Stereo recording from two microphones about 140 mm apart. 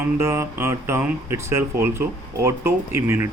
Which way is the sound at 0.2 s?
20° right (ahead or behind).